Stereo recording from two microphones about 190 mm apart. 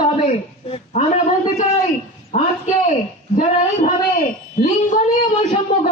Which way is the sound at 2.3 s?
40° left (ahead or behind).